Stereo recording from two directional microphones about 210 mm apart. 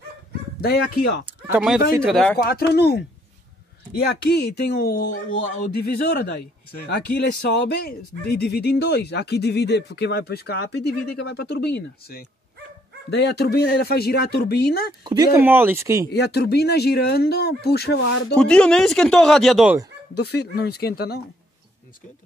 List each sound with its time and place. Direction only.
0.6 s speech: 50° left (ahead or behind)
1.5 s speech: centre (ahead or behind)
2.3 s speech: 50° left (ahead or behind)
15.0 s speech: 15° right (ahead or behind)
16.1 s speech: 50° left (ahead or behind)
18.3 s speech: 5° left (ahead or behind)
20.2 s speech: 50° left (ahead or behind)